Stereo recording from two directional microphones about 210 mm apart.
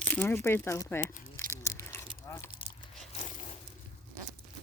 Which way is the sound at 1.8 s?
10° left (ahead or behind).